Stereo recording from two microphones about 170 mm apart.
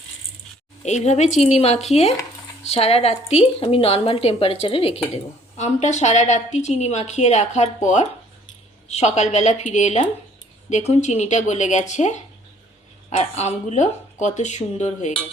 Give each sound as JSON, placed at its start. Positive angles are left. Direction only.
{"t": 0.8, "sound": "a woman's voice", "side_deg": 40}